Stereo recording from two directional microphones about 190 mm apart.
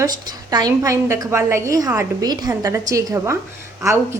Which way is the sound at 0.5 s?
20° right (ahead or behind).